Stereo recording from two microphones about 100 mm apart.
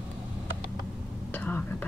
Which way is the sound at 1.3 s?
20° left (ahead or behind).